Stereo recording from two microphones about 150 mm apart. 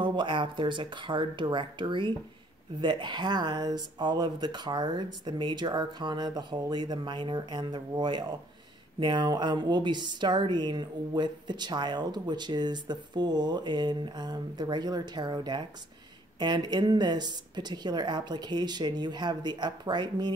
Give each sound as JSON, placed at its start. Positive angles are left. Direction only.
{"t": 0.0, "sound": "speech", "side_deg": -35}